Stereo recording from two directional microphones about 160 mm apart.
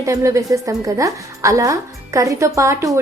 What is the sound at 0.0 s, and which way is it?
A woman's voice, 20° right (ahead or behind).